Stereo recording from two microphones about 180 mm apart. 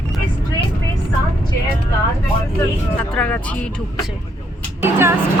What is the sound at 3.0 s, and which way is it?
Speech, 10° left (ahead or behind).